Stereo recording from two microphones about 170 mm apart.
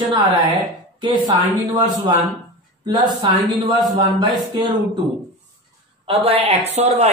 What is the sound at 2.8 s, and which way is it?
Speech, 25° right (ahead or behind).